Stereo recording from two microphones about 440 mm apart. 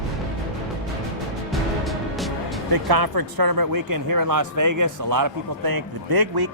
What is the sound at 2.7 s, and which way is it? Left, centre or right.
Speech, right.